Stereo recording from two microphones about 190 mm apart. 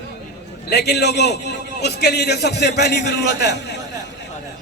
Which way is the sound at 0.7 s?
60° left (ahead or behind).